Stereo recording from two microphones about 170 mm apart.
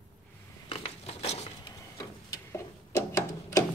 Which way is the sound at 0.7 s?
35° left (ahead or behind).